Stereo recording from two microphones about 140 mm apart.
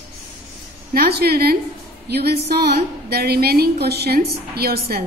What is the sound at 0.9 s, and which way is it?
Speech, 90° right.